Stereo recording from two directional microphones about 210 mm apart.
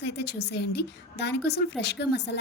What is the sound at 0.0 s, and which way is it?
A woman's voice, 55° left (ahead or behind).